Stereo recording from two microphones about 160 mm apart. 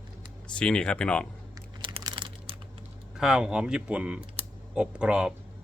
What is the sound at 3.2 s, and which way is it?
A man's voice, 5° right (ahead or behind).